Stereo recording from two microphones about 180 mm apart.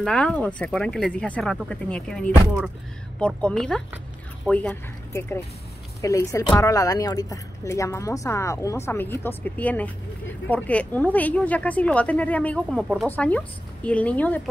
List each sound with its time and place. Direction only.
0.0 s a woman's voice: 5° left (ahead or behind)